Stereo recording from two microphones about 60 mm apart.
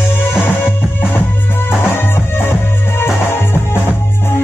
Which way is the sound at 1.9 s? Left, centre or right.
Left.